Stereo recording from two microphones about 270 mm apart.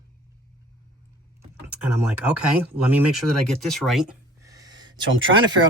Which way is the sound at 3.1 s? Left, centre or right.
Centre.